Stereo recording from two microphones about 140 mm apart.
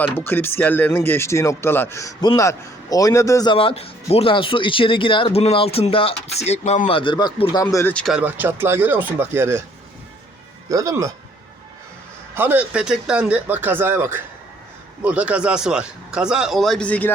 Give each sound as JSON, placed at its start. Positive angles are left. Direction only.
{"t": 0.0, "sound": "speech", "side_deg": 15}
{"t": 3.5, "sound": "speech", "side_deg": 40}
{"t": 7.5, "sound": "speech", "side_deg": 25}
{"t": 7.9, "sound": "speech", "side_deg": 0}
{"t": 8.2, "sound": "speech", "side_deg": -15}
{"t": 10.7, "sound": "speech", "side_deg": -20}
{"t": 12.3, "sound": "speech", "side_deg": -15}